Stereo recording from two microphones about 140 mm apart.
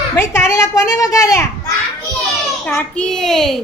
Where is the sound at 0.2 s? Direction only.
20° left (ahead or behind).